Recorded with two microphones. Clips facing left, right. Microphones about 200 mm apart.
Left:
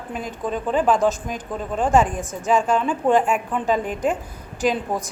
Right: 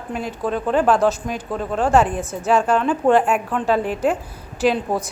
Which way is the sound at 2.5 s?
10° left (ahead or behind).